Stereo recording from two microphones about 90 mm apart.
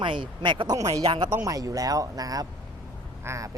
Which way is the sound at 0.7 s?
40° right (ahead or behind).